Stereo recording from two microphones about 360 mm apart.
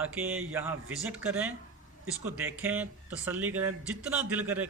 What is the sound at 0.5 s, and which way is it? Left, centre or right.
Speech, centre.